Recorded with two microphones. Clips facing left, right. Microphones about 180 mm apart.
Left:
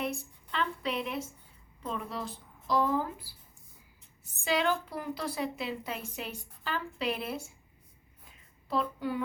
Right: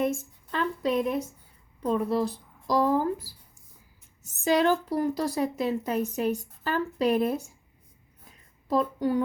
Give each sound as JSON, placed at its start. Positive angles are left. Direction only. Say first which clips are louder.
{"t": 0.0, "sound": "a sound", "louder": "right 8 dB", "side_deg": -45}
{"t": 1.8, "sound": "a woman's voice", "louder": "right 11 dB", "side_deg": -40}
{"t": 8.6, "sound": "a woman's voice", "louder": "right 7 dB", "side_deg": -40}